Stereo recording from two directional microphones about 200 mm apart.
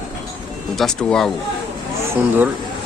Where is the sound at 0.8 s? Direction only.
Centre (ahead or behind).